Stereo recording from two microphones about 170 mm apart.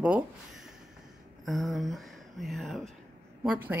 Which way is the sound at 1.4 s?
Centre (ahead or behind).